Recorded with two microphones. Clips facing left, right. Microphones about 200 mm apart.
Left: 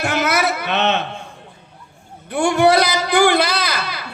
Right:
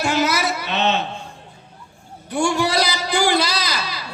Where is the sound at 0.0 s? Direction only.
55° left (ahead or behind).